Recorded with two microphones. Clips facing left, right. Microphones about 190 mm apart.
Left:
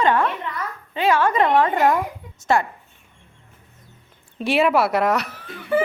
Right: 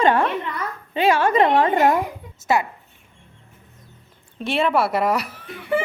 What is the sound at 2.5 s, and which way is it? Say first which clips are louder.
Speech: left 1 dB; 5° right (ahead or behind).